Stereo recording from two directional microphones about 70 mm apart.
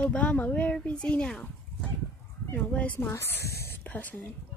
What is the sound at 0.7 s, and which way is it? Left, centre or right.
Speech, centre.